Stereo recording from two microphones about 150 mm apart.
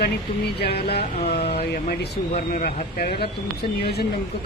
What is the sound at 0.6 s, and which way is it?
Speech, 90° left.